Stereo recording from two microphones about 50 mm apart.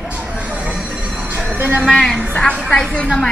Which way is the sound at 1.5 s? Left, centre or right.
Right.